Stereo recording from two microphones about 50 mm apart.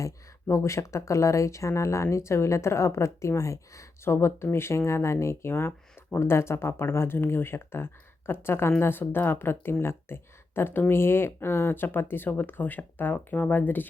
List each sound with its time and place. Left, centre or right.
0.0 s speech: left